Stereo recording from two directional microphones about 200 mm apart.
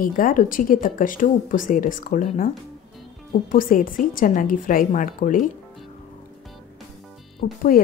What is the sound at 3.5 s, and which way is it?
A woman's voice, 45° left (ahead or behind).